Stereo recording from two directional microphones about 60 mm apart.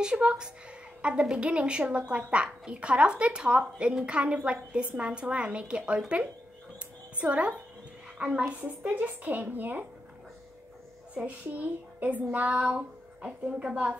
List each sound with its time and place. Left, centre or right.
0.0 s speech: centre
11.2 s speech: right